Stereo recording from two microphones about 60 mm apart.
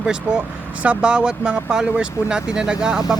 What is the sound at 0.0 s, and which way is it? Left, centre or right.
Speech, centre.